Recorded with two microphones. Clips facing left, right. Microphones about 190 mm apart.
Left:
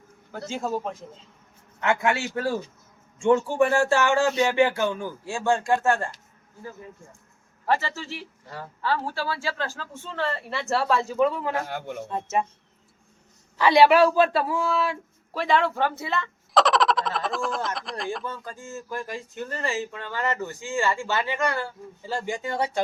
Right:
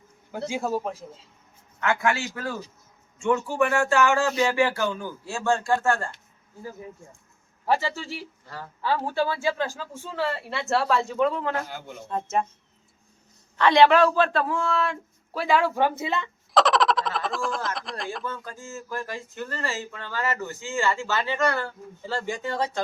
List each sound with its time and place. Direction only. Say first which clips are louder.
0.3 s speech: right 2 dB; 10° right (ahead or behind)
1.8 s speech: left 1 dB; 25° left (ahead or behind)
7.6 s speech: right 1 dB; 10° right (ahead or behind); by 11.5 s 5° left (ahead or behind)
11.7 s a man's voice: left 6 dB; 60° left (ahead or behind)
12.0 s speech: right 1 dB; 5° left (ahead or behind)
13.6 s speech: left 1 dB; 5° left (ahead or behind); by 16.3 s 15° right (ahead or behind)
16.6 s speech: even; centre (ahead or behind)
18.3 s speech: even; 15° left (ahead or behind)